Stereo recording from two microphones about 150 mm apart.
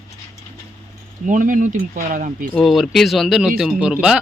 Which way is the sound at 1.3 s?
60° right (ahead or behind).